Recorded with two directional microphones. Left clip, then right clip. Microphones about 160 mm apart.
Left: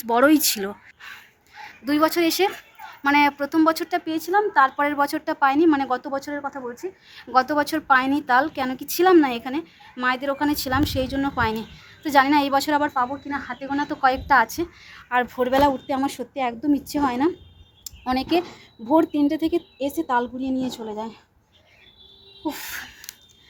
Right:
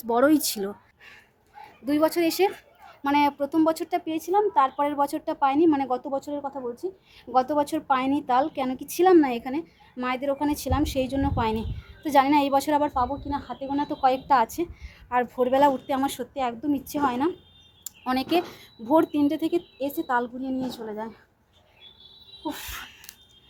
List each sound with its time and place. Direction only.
0.0 s a woman's voice: 5° right (ahead or behind); by 17.3 s 15° left (ahead or behind)
17.8 s a woman's voice: 5° left (ahead or behind)
22.4 s a sound: 20° left (ahead or behind)